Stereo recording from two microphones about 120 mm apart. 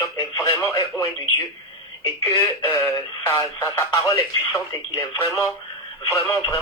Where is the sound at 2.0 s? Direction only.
25° left (ahead or behind).